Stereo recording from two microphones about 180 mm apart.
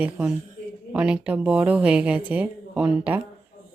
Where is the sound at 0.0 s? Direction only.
5° right (ahead or behind).